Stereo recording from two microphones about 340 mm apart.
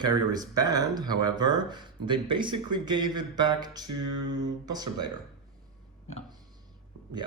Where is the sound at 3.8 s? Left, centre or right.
Right.